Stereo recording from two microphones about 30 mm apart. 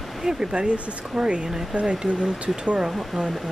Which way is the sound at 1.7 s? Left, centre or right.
Right.